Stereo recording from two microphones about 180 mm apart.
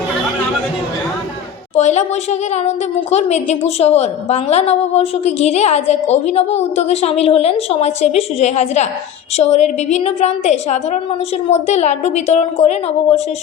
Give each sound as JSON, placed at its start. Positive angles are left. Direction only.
{"t": 1.7, "sound": "a woman's voice", "side_deg": 40}